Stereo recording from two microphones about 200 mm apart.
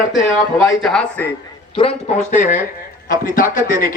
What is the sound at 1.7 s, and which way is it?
Speech, 30° left (ahead or behind).